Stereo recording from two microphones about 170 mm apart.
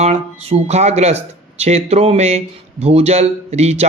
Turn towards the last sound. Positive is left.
turn(degrees=-40)  # may be behind; listen again after turning